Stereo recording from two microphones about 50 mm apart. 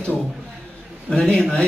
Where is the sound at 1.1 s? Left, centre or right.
Centre.